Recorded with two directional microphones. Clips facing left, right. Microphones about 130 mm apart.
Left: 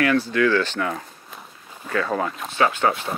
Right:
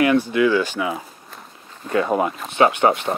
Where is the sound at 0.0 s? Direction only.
15° right (ahead or behind).